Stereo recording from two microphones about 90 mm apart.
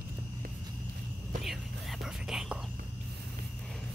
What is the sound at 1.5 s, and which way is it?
Whispering, centre (ahead or behind).